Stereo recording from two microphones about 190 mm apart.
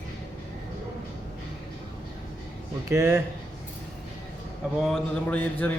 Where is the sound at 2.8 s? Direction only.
15° right (ahead or behind).